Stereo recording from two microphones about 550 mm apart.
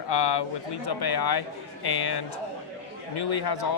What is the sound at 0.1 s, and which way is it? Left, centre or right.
Speech, left.